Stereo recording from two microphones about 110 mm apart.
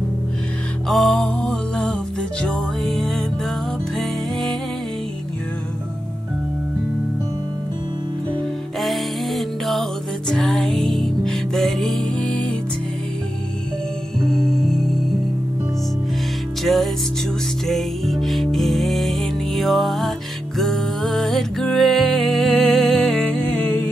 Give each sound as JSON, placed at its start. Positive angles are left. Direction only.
{"t": 0.8, "sound": "music", "side_deg": 0}
{"t": 8.7, "sound": "music", "side_deg": 0}
{"t": 14.2, "sound": "music", "side_deg": 5}
{"t": 16.6, "sound": "music", "side_deg": 0}